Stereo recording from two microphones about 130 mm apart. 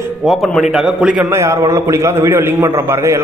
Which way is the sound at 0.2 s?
Centre (ahead or behind).